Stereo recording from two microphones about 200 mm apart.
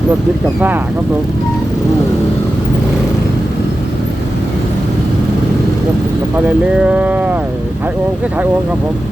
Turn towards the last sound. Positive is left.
turn(degrees=-5)  # may be behind; listen again after turning